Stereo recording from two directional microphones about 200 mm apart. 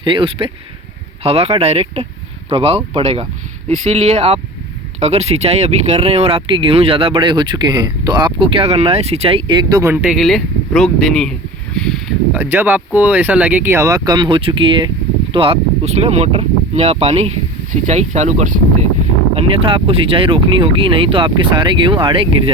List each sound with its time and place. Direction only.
0.0 s speech: 25° right (ahead or behind)